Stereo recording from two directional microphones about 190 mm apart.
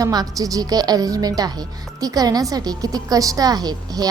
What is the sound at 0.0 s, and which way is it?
Speech, 20° right (ahead or behind).